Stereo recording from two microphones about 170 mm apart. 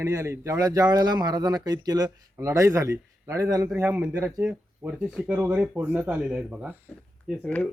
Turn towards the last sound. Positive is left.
turn(degrees=5)  # may be behind; listen again after turning